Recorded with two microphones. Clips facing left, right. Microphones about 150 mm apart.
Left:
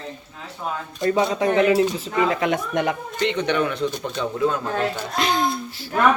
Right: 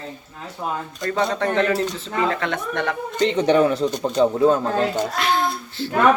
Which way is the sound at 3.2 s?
35° right (ahead or behind).